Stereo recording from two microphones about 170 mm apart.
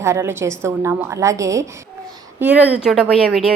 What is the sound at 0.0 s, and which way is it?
A woman's voice, 15° right (ahead or behind).